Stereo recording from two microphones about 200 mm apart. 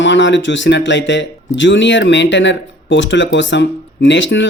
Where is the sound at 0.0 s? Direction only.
65° left (ahead or behind).